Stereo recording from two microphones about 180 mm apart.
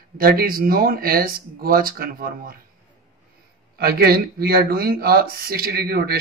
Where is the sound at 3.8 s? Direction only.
60° right (ahead or behind).